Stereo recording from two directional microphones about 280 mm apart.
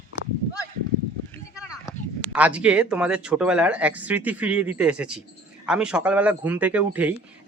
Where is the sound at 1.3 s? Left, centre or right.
Centre.